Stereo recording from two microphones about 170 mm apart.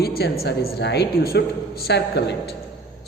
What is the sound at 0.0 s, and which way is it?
Speech, 65° left (ahead or behind).